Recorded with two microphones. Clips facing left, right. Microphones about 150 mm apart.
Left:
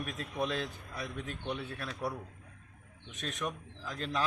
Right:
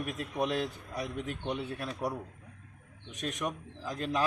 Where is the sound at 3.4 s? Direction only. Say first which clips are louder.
Right 2 dB; 15° right (ahead or behind).